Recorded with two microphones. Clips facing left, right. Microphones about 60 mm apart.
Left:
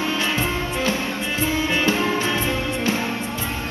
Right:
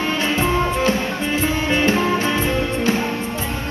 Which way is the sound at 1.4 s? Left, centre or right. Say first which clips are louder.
Right 1 dB; right.